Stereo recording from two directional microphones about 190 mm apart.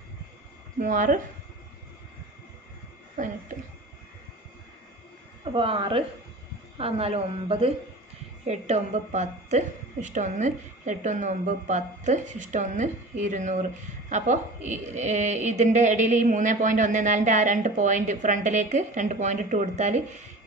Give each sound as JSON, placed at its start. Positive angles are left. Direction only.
{"t": 0.7, "sound": "speech", "side_deg": -45}
{"t": 3.2, "sound": "speech", "side_deg": -45}
{"t": 5.4, "sound": "a woman's voice", "side_deg": -30}